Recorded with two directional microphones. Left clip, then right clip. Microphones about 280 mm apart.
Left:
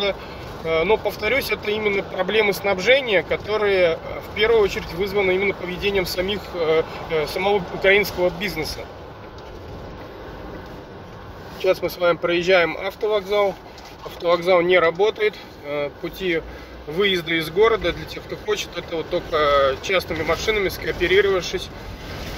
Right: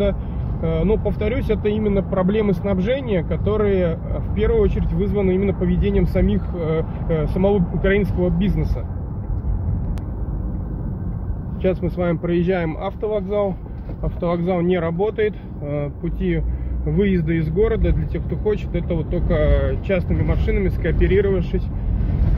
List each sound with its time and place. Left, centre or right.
0.7 s speech: centre
12.0 s speech: centre
19.3 s speech: centre